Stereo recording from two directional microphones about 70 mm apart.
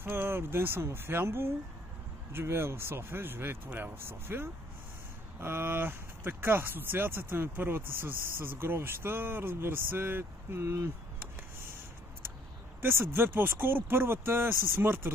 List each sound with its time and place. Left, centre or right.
0.0 s speech: right
12.8 s speech: right